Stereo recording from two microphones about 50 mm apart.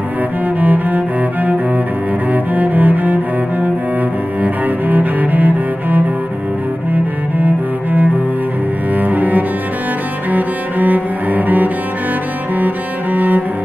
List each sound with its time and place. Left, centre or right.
0.6 s cello: right
4.4 s cello: right